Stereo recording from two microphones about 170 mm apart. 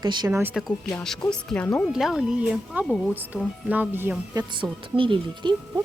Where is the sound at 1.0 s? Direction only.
5° left (ahead or behind); by 4.4 s 15° right (ahead or behind).